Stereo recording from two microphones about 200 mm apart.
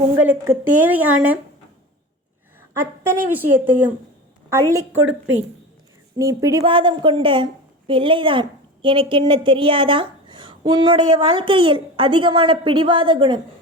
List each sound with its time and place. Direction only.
0.2 s a woman's voice: 10° right (ahead or behind)
2.6 s a woman's voice: 10° right (ahead or behind)
4.9 s a woman's voice: 80° right
6.1 s a woman's voice: 15° right (ahead or behind)